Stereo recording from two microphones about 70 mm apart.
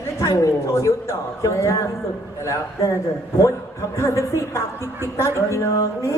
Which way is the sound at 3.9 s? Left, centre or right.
Left.